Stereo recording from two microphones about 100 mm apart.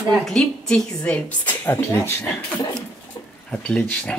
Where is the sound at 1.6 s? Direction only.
25° left (ahead or behind).